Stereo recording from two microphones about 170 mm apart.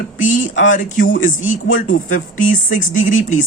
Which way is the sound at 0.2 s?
50° left (ahead or behind).